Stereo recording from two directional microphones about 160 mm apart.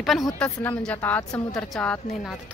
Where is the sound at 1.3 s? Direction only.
25° left (ahead or behind).